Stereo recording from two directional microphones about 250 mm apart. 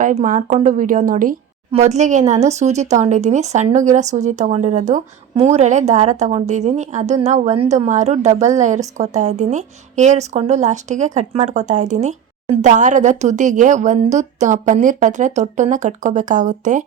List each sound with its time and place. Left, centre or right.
0.0 s a woman's voice: right